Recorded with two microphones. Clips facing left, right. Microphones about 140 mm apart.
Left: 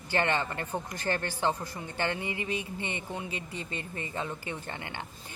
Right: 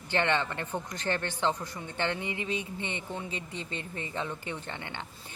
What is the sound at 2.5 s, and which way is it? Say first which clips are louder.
Speech: even; 5° left (ahead or behind).